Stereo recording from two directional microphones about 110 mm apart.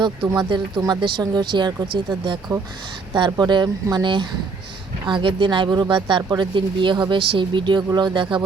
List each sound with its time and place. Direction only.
0.3 s speech: 45° right (ahead or behind)